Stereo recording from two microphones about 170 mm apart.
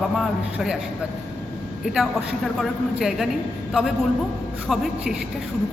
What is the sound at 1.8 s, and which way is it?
A man's voice, centre (ahead or behind).